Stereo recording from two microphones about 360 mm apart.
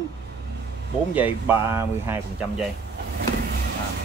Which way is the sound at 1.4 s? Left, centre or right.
Centre.